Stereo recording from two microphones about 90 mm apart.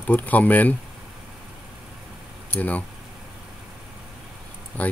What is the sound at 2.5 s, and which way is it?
Speech, 15° left (ahead or behind).